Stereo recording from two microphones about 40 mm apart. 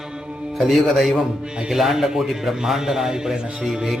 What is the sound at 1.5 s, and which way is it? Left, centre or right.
Speech, centre.